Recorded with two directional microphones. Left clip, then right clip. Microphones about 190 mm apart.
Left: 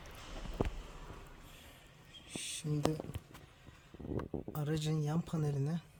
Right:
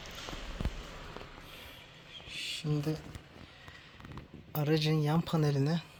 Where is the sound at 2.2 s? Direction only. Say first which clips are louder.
Right 5 dB; 10° right (ahead or behind).